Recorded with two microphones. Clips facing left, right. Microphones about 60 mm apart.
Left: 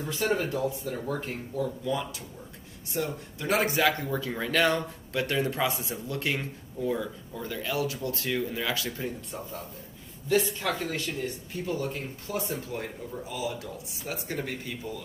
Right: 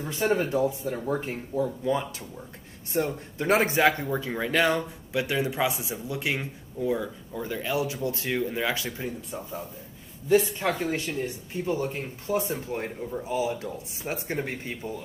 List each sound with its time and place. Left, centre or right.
0.0 s a man's voice: right
9.0 s a man's voice: centre
10.6 s speech: right